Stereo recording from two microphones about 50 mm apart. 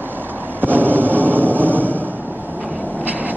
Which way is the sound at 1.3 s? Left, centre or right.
Right.